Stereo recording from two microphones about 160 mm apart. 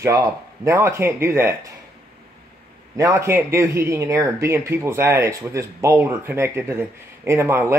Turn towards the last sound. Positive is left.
turn(degrees=-15)  # may be behind; listen again after turning